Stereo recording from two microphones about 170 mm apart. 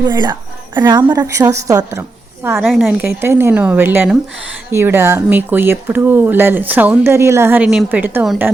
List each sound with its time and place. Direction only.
0.1 s a woman's voice: 25° right (ahead or behind); by 8.3 s 10° right (ahead or behind)